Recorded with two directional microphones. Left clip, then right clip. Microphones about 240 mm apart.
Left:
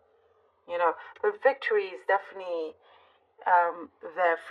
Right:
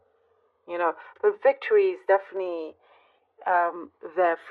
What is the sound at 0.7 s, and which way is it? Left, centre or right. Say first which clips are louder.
A woman's voice: even; right.